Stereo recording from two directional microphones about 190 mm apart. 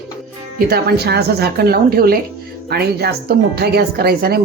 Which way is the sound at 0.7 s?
55° right (ahead or behind).